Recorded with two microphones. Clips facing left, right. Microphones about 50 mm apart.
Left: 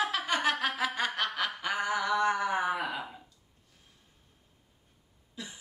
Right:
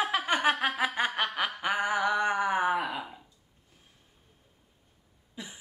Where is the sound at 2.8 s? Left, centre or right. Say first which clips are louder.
Right 1 dB; centre.